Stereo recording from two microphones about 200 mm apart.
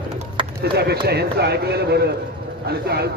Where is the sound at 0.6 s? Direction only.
55° right (ahead or behind).